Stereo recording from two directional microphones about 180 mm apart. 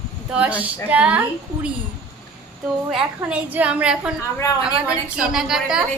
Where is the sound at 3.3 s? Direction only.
5° right (ahead or behind).